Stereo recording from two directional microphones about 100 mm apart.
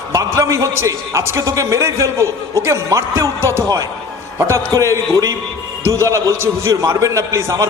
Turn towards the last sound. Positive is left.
turn(degrees=-35)  # may be behind; listen again after turning